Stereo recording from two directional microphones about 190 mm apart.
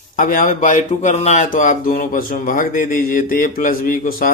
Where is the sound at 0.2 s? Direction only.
45° left (ahead or behind).